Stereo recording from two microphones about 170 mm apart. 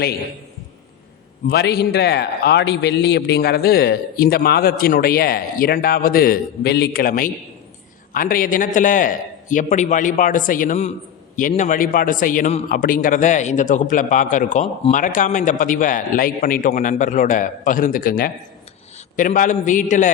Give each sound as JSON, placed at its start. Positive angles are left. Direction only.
{"t": 1.5, "sound": "a man's voice", "side_deg": 75}
{"t": 12.6, "sound": "a man's voice", "side_deg": 55}